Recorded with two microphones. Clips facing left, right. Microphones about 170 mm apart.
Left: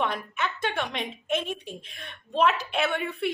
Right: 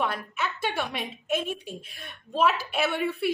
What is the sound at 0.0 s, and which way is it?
A woman's voice, 5° right (ahead or behind).